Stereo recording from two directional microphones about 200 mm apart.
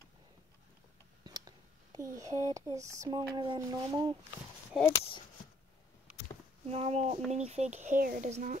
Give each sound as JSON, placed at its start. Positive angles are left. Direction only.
{"t": 1.2, "sound": "speech", "side_deg": -20}
{"t": 4.7, "sound": "speech", "side_deg": 0}
{"t": 6.7, "sound": "speech", "side_deg": -30}